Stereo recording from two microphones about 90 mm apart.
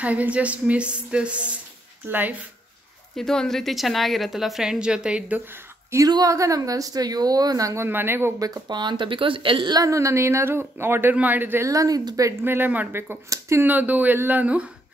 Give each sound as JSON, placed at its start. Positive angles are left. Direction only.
{"t": 0.0, "sound": "a woman's voice", "side_deg": -15}
{"t": 3.2, "sound": "a woman's voice", "side_deg": 5}
{"t": 5.5, "sound": "a sound", "side_deg": -30}
{"t": 6.0, "sound": "a woman's voice", "side_deg": -45}
{"t": 8.4, "sound": "speech", "side_deg": -45}
{"t": 9.7, "sound": "speech", "side_deg": -40}
{"t": 11.6, "sound": "a woman's voice", "side_deg": -40}
{"t": 12.3, "sound": "speech", "side_deg": -25}